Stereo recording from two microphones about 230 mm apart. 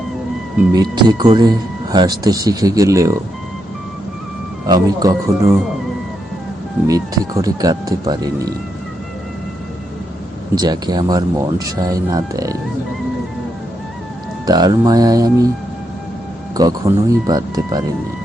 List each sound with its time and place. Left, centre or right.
0.7 s speech: centre
4.6 s speech: centre
6.8 s speech: centre
10.5 s speech: centre
14.4 s speech: centre
16.6 s speech: centre